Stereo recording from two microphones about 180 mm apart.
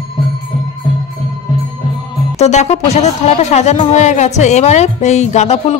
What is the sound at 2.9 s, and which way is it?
A woman's voice, 35° left (ahead or behind).